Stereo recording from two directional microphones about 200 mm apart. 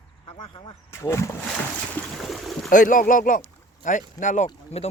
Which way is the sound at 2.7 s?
40° left (ahead or behind).